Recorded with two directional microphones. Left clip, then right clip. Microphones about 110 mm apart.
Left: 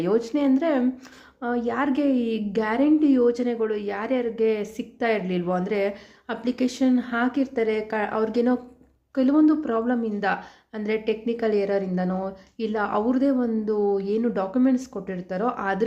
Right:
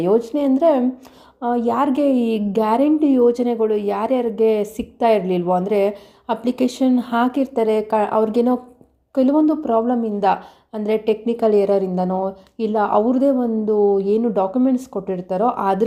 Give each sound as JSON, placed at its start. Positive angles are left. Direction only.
{"t": 0.0, "sound": "a woman's voice", "side_deg": -25}
{"t": 12.0, "sound": "a woman's voice", "side_deg": 5}
{"t": 12.5, "sound": "a woman's voice", "side_deg": -30}